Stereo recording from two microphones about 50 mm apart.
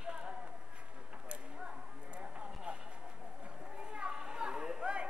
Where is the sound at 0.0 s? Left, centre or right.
Centre.